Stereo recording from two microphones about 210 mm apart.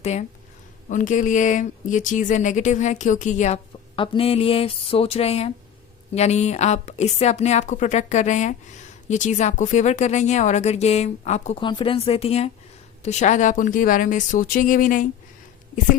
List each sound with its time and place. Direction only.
0.0 s speech: 30° left (ahead or behind)